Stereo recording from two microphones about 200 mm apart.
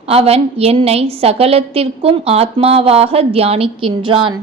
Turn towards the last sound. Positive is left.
turn(degrees=-25)  # may be behind; listen again after turning